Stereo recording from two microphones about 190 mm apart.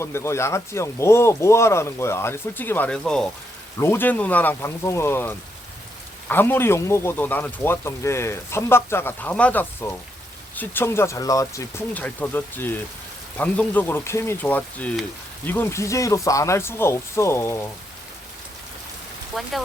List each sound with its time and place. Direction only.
0.0 s speech: 15° left (ahead or behind)
19.4 s speech: centre (ahead or behind)